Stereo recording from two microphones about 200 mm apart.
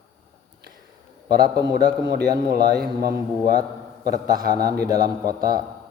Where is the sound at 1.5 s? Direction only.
20° right (ahead or behind).